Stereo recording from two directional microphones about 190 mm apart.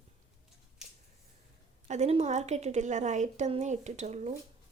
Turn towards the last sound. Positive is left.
turn(degrees=-35)  # may be behind; listen again after turning